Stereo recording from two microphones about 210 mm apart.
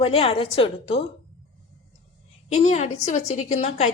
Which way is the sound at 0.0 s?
30° left (ahead or behind).